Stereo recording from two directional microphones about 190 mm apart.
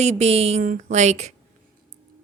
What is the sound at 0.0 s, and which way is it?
A woman's voice, 35° right (ahead or behind).